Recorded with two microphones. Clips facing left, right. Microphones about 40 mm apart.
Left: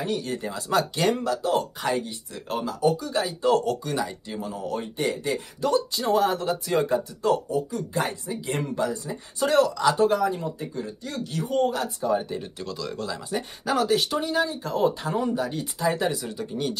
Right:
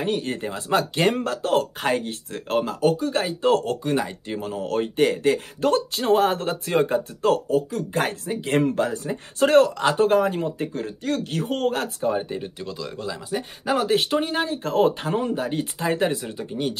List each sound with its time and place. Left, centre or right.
0.0 s speech: right
12.1 s speech: right
13.8 s speech: right